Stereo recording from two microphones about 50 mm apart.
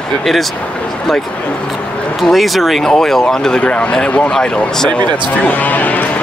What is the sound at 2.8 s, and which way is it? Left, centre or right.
Speech, centre.